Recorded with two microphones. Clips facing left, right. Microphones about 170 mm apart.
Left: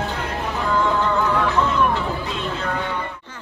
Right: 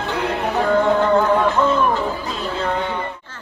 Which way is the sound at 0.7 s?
60° right (ahead or behind).